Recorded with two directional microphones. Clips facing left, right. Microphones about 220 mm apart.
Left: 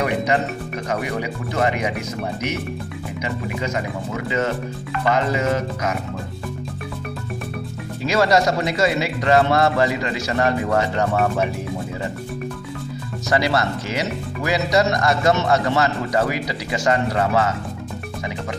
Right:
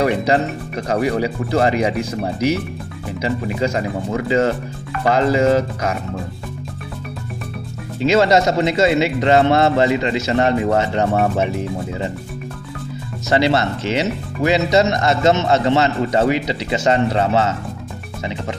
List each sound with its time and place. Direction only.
0.0 s speech: 30° right (ahead or behind)
5.0 s speech: 30° right (ahead or behind)
8.0 s speech: 25° right (ahead or behind)
13.3 s speech: 25° right (ahead or behind)